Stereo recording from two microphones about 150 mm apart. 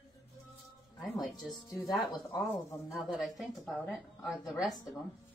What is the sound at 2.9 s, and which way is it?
A woman's voice, centre (ahead or behind).